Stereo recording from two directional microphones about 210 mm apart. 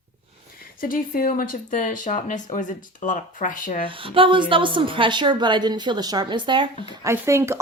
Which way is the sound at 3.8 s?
25° right (ahead or behind).